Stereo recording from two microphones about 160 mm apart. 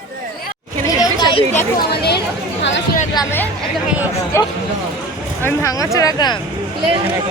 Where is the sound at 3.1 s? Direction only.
25° left (ahead or behind).